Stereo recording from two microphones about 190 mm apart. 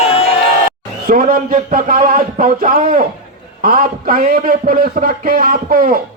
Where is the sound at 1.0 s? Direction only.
45° right (ahead or behind).